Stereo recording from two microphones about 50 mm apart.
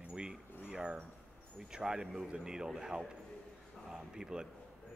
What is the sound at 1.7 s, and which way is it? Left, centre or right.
A man's voice, centre.